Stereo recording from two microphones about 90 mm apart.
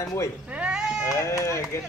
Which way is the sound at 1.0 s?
35° left (ahead or behind).